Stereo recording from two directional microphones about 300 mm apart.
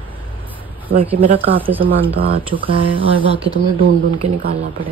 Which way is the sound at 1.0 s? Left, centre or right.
Centre.